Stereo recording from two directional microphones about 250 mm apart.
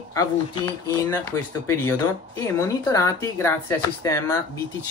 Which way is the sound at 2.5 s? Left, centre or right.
Centre.